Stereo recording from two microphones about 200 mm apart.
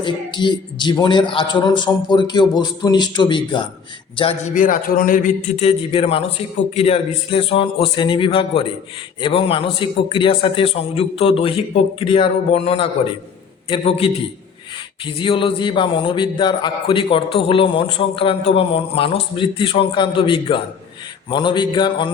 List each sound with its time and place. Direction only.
0.0 s a man's voice: 25° left (ahead or behind)